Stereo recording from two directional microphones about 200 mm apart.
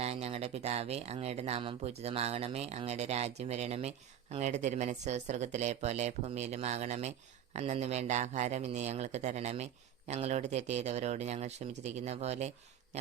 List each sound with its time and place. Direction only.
0.0 s speech: 30° right (ahead or behind)